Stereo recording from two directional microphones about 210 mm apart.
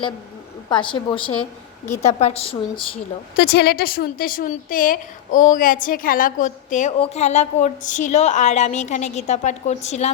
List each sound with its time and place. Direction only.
0.7 s a woman's voice: 25° left (ahead or behind)
3.3 s a woman's voice: 50° left (ahead or behind); by 10.1 s 30° left (ahead or behind)